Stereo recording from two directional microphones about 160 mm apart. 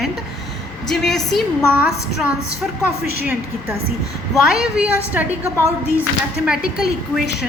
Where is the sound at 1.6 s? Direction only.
10° right (ahead or behind).